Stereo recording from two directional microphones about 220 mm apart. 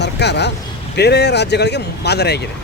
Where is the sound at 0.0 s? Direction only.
50° left (ahead or behind).